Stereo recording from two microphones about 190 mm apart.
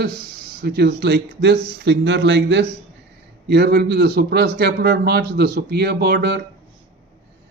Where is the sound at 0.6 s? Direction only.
55° right (ahead or behind).